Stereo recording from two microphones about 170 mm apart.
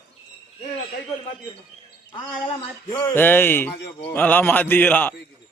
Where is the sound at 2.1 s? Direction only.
25° left (ahead or behind).